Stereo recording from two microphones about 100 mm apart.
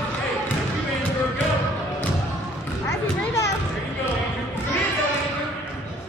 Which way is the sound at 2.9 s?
30° left (ahead or behind).